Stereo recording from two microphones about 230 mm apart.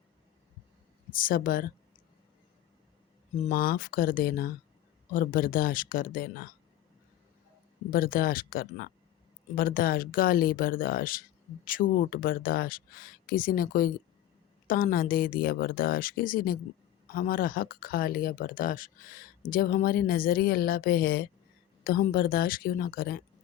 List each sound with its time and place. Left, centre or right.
1.1 s speech: left
3.4 s speech: left
7.9 s speech: left